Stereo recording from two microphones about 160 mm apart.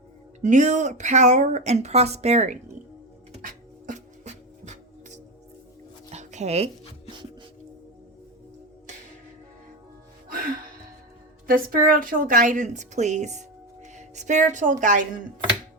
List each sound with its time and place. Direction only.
0.4 s speech: 50° right (ahead or behind)
3.4 s music: 55° right (ahead or behind)
6.1 s a sound: 45° right (ahead or behind)
10.2 s music: 60° right (ahead or behind)
11.4 s a woman's voice: 65° right (ahead or behind)